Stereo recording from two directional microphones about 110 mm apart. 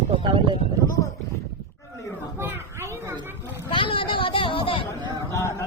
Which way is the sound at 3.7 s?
50° left (ahead or behind).